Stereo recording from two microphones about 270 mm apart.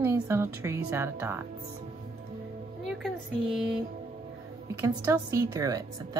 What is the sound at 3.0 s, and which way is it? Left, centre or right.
Speech, centre.